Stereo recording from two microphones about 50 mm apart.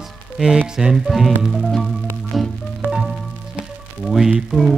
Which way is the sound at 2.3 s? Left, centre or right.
Centre.